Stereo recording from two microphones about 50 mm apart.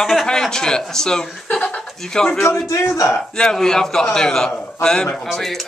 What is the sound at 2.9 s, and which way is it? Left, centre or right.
Speech, left.